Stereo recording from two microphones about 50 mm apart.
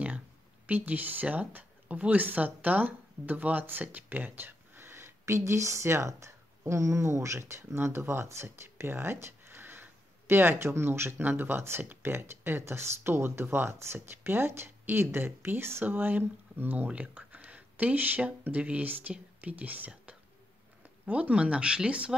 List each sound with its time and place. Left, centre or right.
0.7 s speech: right
5.2 s a woman's voice: right
12.0 s speech: right
15.8 s speech: right
18.9 s speech: right
21.0 s speech: right